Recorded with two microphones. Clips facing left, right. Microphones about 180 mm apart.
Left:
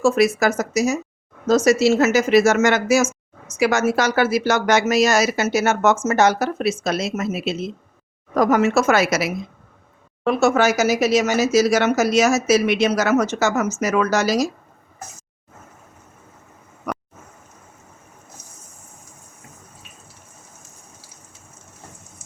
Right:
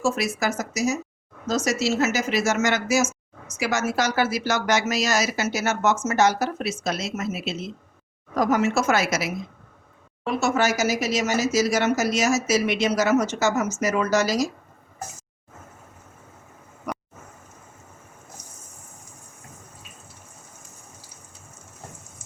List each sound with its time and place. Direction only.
0.0 s speech: 60° left (ahead or behind)